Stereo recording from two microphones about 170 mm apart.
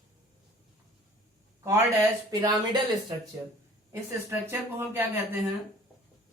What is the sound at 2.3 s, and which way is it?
Speech, 20° right (ahead or behind).